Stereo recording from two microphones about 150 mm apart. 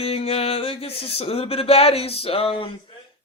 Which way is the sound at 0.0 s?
40° left (ahead or behind).